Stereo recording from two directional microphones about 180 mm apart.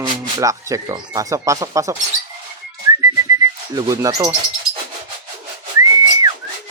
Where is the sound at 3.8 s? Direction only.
20° right (ahead or behind).